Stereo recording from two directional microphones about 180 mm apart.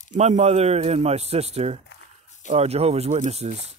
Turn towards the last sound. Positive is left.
turn(degrees=-40)  # may be behind; listen again after turning